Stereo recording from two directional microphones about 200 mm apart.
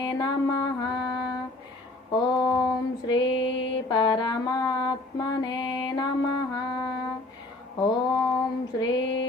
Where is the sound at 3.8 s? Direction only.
20° left (ahead or behind).